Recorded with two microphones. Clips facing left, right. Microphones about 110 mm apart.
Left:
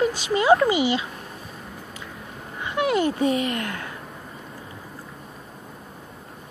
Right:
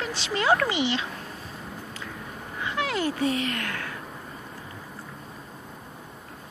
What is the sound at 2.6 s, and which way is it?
Speech, 20° left (ahead or behind).